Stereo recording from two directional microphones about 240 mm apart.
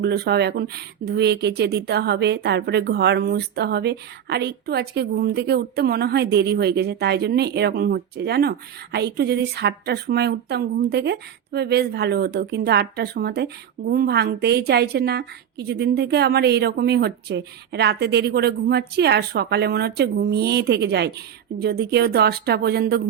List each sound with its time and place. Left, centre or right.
0.0 s speech: right